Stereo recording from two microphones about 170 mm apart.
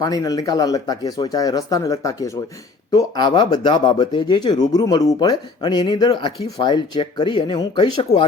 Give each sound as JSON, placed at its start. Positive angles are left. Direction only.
{"t": 0.0, "sound": "speech", "side_deg": 20}